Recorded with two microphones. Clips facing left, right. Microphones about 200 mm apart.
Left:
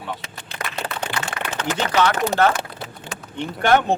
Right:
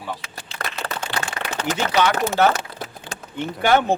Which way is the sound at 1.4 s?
35° right (ahead or behind).